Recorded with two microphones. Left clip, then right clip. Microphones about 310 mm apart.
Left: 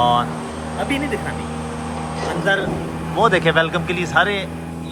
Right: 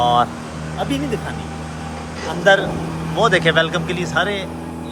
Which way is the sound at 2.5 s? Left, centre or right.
Right.